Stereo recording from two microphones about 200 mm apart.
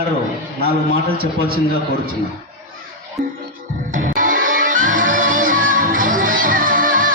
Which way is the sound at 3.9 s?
40° right (ahead or behind).